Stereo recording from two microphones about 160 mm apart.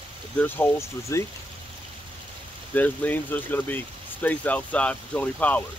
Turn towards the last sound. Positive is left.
turn(degrees=10)  # may be behind; listen again after turning